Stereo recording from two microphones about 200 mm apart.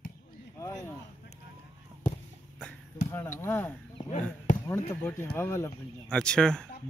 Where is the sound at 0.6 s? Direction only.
15° left (ahead or behind).